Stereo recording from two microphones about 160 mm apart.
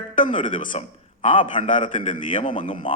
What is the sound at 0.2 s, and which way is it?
Speech, 50° left (ahead or behind).